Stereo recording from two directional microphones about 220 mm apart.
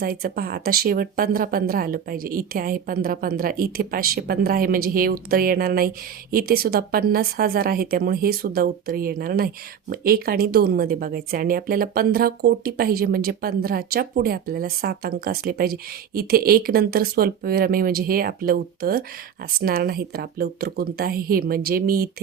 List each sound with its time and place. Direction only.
0.0 s speech: 40° right (ahead or behind)